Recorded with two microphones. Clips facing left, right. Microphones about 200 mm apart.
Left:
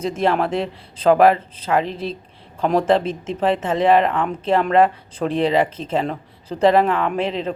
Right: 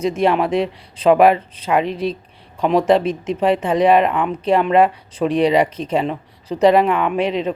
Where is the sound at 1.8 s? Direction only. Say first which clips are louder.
Right 4 dB; 30° left (ahead or behind).